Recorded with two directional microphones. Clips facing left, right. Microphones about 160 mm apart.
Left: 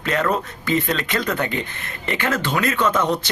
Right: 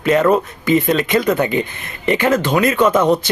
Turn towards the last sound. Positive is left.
turn(degrees=-10)  # may be behind; listen again after turning